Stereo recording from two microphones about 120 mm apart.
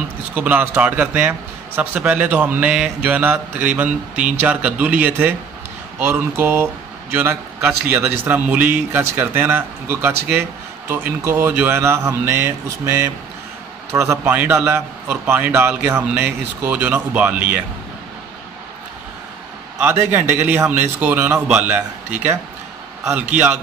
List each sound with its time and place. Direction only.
0.3 s speech: 15° right (ahead or behind)
19.8 s speech: 20° right (ahead or behind)